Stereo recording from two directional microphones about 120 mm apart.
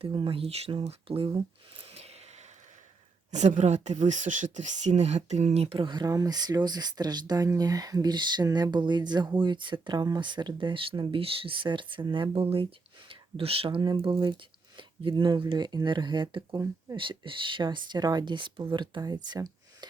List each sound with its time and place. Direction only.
0.0 s speech: 45° right (ahead or behind)
1.8 s a sound: 60° right (ahead or behind)
3.3 s speech: 80° right; by 17.0 s 35° right (ahead or behind)
17.0 s speech: 45° right (ahead or behind)